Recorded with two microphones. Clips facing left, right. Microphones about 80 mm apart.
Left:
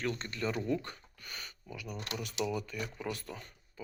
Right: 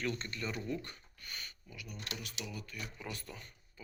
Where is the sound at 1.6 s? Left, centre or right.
Left.